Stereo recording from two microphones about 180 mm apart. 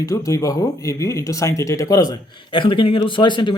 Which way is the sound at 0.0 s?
20° left (ahead or behind).